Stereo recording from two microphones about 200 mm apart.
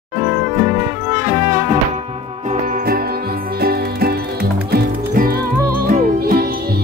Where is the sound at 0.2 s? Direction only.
30° right (ahead or behind).